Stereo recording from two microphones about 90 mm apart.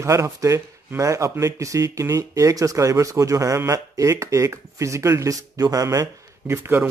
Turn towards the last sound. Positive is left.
turn(degrees=-25)  # may be behind; listen again after turning